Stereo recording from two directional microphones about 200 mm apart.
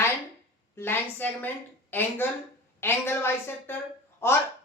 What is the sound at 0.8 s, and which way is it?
Speech, 10° left (ahead or behind).